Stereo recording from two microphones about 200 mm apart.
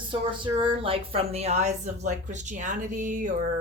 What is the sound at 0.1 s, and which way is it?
A woman's voice, 25° right (ahead or behind).